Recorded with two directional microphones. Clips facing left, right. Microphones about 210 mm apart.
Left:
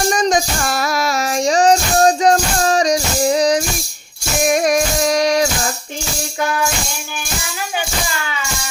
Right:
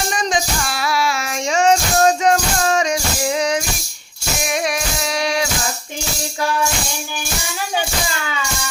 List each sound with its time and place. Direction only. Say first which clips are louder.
0.1 s child singing: left 5 dB; 45° left (ahead or behind)
4.4 s music: left 8 dB; 45° left (ahead or behind)